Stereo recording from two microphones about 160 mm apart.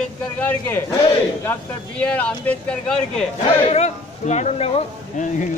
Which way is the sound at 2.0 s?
10° left (ahead or behind).